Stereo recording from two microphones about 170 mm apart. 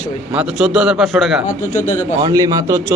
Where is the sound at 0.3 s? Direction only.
5° right (ahead or behind).